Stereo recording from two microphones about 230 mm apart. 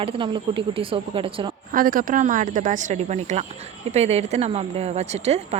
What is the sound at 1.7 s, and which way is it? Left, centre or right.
A woman's voice, right.